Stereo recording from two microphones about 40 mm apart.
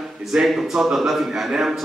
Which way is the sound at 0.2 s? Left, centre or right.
Centre.